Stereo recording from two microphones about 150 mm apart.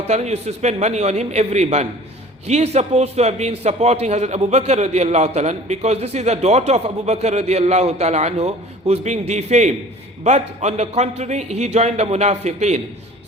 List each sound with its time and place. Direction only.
0.1 s a man's voice: 50° right (ahead or behind)